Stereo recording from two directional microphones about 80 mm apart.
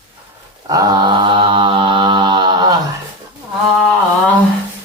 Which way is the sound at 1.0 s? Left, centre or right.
Right.